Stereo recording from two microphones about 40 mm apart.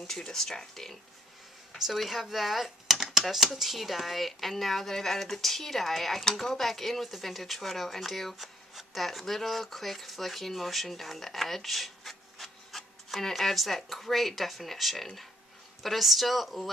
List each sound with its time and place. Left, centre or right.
0.0 s speech: centre
2.0 s speech: centre